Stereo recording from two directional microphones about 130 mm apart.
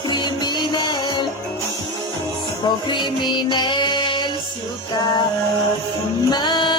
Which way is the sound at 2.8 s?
35° left (ahead or behind).